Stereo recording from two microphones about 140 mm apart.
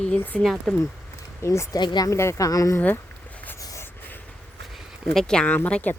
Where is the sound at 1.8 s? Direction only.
35° left (ahead or behind).